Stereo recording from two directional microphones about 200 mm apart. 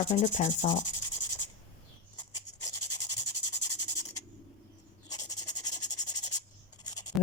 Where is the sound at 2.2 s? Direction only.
20° left (ahead or behind).